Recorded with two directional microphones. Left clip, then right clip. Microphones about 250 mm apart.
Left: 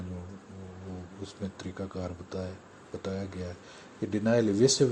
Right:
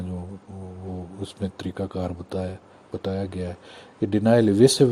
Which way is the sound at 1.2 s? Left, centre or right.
Right.